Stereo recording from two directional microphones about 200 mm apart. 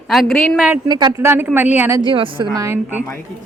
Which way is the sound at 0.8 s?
20° right (ahead or behind).